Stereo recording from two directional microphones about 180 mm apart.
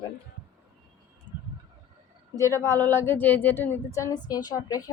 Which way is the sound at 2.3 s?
15° left (ahead or behind).